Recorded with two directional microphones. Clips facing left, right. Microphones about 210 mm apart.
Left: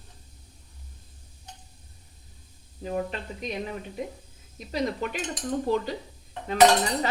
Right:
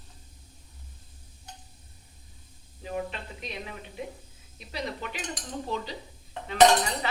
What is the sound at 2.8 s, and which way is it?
Speech, 40° left (ahead or behind).